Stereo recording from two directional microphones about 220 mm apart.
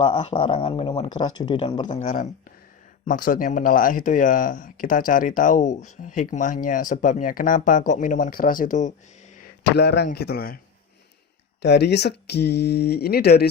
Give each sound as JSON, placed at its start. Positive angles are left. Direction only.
{"t": 0.1, "sound": "speech", "side_deg": 20}
{"t": 1.9, "sound": "speech", "side_deg": 30}
{"t": 9.6, "sound": "speech", "side_deg": 50}
{"t": 11.6, "sound": "speech", "side_deg": 50}